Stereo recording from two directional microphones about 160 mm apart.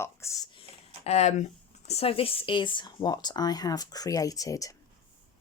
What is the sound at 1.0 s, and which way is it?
Speech, 45° left (ahead or behind).